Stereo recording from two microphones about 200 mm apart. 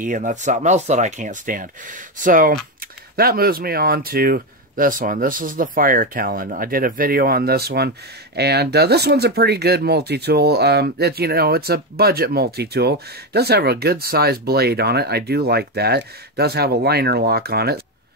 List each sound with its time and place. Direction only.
0.0 s speech: 40° right (ahead or behind)